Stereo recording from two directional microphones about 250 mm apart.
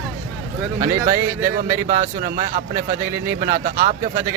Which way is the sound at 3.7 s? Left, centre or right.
Right.